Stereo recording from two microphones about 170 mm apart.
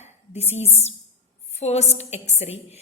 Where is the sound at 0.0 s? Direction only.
40° left (ahead or behind).